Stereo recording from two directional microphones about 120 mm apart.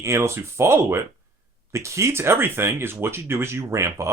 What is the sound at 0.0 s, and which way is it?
Speech, 25° right (ahead or behind).